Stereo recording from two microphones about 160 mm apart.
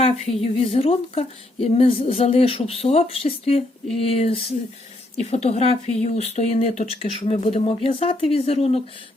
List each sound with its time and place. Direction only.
0.0 s speech: 40° left (ahead or behind)